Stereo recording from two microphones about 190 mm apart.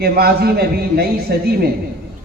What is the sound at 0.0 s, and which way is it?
A man's voice, 55° right (ahead or behind).